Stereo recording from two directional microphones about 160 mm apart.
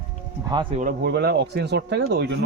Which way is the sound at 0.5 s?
30° right (ahead or behind).